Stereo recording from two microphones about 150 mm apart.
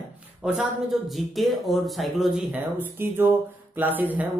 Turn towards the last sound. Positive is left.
turn(degrees=-10)  # may be behind; listen again after turning